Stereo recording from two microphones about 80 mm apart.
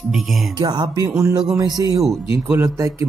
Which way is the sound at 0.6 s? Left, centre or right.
Right.